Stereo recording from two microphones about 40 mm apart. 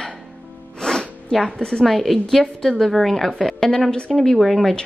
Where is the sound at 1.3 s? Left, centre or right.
Centre.